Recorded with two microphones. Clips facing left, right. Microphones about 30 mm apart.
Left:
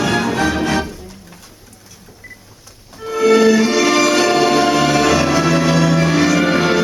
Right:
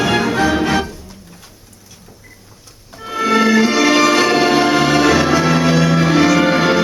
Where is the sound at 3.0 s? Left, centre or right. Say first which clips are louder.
Left 3 dB; centre.